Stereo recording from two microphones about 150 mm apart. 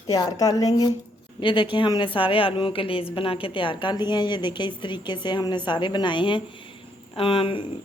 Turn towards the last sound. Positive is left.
turn(degrees=35)  # may be behind; listen again after turning